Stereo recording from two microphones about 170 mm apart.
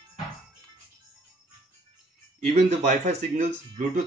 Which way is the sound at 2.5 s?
45° right (ahead or behind).